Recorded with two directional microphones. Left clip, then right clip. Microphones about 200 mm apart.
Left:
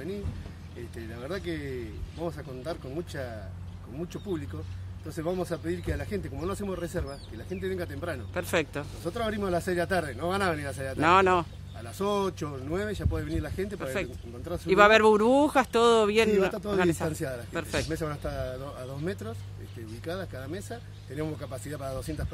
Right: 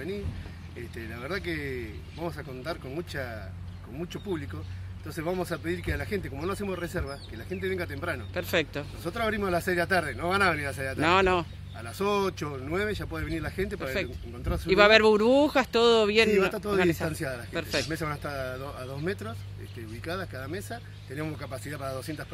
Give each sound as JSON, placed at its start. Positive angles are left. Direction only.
{"t": 0.9, "sound": "speech", "side_deg": 10}
{"t": 17.1, "sound": "speech", "side_deg": 15}
{"t": 17.5, "sound": "speech", "side_deg": 0}
{"t": 17.8, "sound": "speech", "side_deg": 15}